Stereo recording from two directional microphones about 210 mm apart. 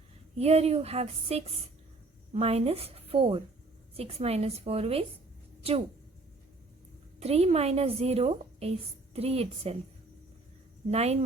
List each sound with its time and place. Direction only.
0.3 s a woman's voice: 30° right (ahead or behind)
7.2 s a woman's voice: 30° right (ahead or behind)
10.9 s a woman's voice: 30° right (ahead or behind)